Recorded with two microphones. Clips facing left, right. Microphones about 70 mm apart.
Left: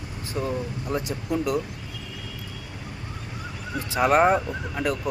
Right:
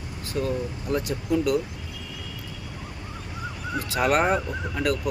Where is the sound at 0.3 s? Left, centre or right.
Centre.